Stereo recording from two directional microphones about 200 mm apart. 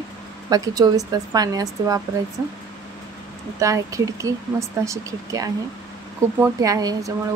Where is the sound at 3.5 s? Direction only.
15° right (ahead or behind).